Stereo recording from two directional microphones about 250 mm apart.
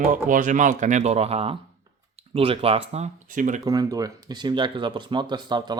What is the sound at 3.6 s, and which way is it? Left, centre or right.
Speech, centre.